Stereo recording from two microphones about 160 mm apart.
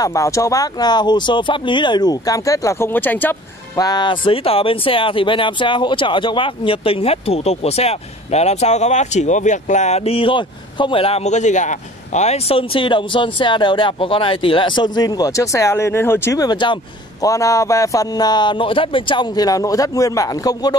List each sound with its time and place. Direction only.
0.0 s speech: 20° left (ahead or behind)
3.7 s speech: 25° left (ahead or behind)